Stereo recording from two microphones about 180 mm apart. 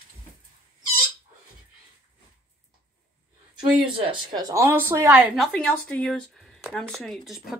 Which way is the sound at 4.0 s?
25° right (ahead or behind).